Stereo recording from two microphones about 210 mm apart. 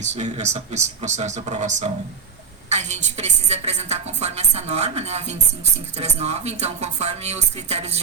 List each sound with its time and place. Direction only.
0.0 s a woman's voice: 35° right (ahead or behind)